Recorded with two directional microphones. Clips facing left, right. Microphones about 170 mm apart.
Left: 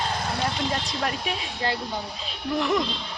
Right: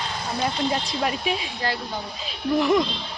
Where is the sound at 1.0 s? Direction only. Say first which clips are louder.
Right 3 dB; 5° right (ahead or behind).